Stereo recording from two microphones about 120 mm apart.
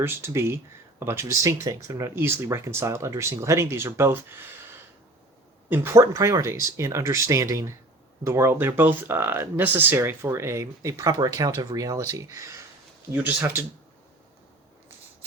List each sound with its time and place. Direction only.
0.0 s speech: 20° right (ahead or behind)
5.6 s speech: 20° right (ahead or behind)